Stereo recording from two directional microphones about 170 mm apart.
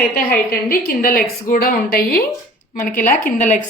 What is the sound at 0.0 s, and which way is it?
A woman's voice, 60° left (ahead or behind).